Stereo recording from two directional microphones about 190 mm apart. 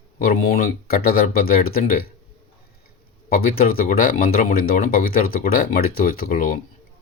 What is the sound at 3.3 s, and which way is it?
Speech, 50° left (ahead or behind).